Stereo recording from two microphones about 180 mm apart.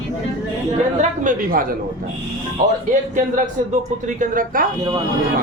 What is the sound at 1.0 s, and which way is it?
Speech, 50° right (ahead or behind).